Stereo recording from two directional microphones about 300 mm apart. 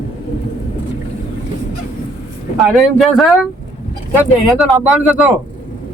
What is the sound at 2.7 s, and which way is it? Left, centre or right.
Speech, centre.